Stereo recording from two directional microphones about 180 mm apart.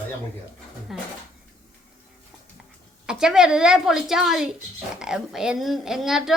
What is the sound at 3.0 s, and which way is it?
Speech, 5° right (ahead or behind).